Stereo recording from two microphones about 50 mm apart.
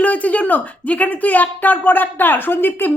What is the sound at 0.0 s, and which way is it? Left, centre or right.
Speech, left.